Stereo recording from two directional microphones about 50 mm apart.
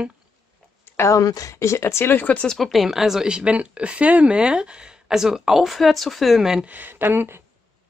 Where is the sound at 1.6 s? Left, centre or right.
Left.